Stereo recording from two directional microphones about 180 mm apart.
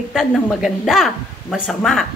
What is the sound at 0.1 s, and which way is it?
A woman's voice, centre (ahead or behind).